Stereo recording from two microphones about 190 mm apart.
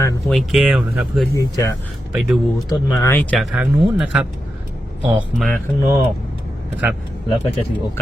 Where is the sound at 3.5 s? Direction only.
5° right (ahead or behind).